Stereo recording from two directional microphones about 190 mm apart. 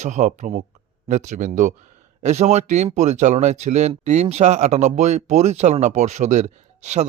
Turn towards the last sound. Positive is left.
turn(degrees=-35)  # may be behind; listen again after turning